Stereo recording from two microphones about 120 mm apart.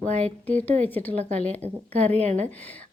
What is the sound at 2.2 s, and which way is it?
Speech, 65° right (ahead or behind).